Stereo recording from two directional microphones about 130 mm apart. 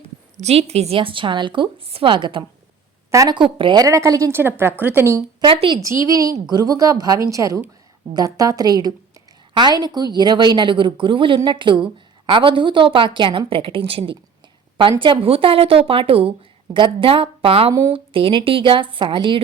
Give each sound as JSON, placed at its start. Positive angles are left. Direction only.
{"t": 0.3, "sound": "a woman's voice", "side_deg": -55}
{"t": 3.1, "sound": "a woman's voice", "side_deg": -25}
{"t": 3.3, "sound": "a woman's voice", "side_deg": -40}
{"t": 5.4, "sound": "speech", "side_deg": -40}
{"t": 6.0, "sound": "a woman's voice", "side_deg": -25}